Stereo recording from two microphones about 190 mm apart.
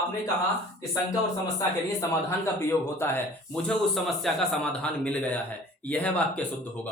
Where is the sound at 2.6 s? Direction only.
10° left (ahead or behind).